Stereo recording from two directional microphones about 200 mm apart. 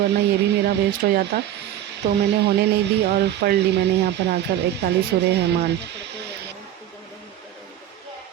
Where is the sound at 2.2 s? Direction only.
55° right (ahead or behind).